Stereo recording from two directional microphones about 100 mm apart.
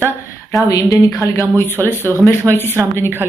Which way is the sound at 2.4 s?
30° right (ahead or behind).